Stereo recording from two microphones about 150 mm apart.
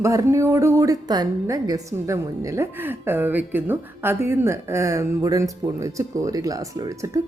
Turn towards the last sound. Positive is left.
turn(degrees=-20)  # may be behind; listen again after turning